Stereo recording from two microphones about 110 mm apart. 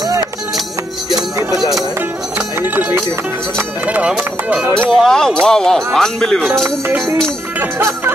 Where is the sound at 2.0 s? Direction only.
15° right (ahead or behind).